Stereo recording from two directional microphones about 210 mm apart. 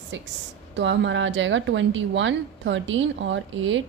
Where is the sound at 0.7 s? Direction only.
60° right (ahead or behind).